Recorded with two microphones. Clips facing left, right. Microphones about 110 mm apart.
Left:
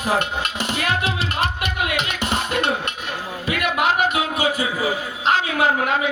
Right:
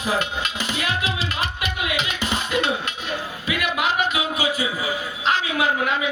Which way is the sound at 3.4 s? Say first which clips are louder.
Left 4 dB; 50° left (ahead or behind).